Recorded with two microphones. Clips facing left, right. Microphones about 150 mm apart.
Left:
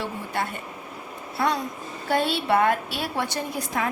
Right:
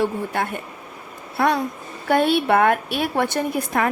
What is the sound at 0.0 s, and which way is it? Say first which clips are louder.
A woman's voice: right 6 dB; 55° right (ahead or behind).